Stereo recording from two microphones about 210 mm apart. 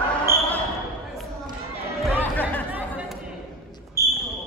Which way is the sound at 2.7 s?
5° right (ahead or behind).